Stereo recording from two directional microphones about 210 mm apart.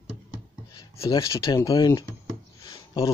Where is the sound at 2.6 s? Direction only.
25° left (ahead or behind).